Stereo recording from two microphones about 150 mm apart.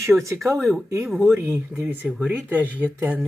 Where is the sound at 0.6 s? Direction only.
Centre (ahead or behind).